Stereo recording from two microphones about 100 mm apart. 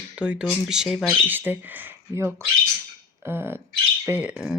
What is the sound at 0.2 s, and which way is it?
Speech, 10° right (ahead or behind).